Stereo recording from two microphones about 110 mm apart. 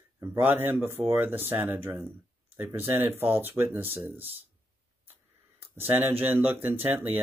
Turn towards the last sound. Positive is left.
turn(degrees=-15)  # may be behind; listen again after turning